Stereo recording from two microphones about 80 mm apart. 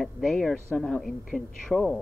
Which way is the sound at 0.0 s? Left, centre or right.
Centre.